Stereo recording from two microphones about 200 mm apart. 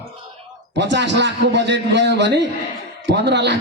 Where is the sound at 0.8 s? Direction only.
60° right (ahead or behind).